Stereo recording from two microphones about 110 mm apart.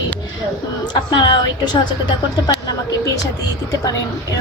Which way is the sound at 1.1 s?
45° left (ahead or behind).